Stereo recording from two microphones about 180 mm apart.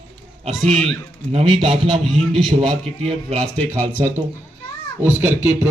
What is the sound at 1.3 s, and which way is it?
Speech, 35° right (ahead or behind).